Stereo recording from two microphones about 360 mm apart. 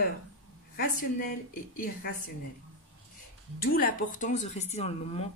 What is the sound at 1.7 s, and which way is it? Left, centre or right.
Speech, left.